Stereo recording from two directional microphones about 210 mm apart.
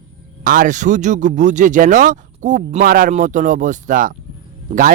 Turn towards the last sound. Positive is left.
turn(degrees=-40)  # may be behind; listen again after turning